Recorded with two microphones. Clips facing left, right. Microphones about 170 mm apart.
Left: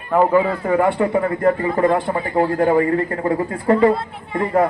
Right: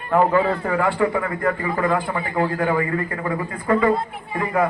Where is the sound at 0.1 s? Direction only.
10° left (ahead or behind).